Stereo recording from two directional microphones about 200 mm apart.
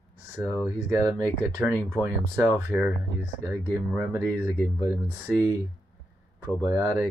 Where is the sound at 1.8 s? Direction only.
15° right (ahead or behind).